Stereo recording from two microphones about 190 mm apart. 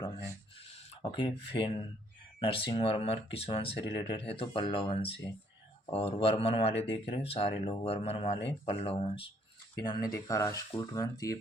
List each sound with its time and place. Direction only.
1.1 s speech: 25° left (ahead or behind)